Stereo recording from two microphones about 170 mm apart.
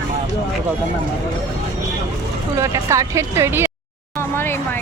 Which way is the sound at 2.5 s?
15° right (ahead or behind).